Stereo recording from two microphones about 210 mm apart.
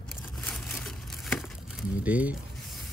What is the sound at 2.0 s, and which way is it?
Speech, 5° right (ahead or behind).